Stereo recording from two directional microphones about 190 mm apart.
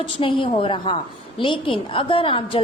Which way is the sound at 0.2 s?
25° left (ahead or behind).